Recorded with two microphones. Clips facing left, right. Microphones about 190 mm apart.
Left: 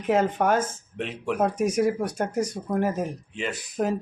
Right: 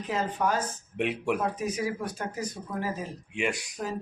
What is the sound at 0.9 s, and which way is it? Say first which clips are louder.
Speech: right 1 dB; 10° right (ahead or behind).